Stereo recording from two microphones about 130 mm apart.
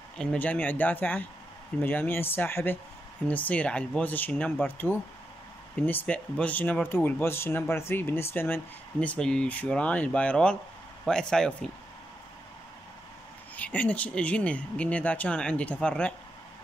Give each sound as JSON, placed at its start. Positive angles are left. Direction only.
{"t": 0.2, "sound": "speech", "side_deg": 10}
{"t": 13.6, "sound": "speech", "side_deg": 10}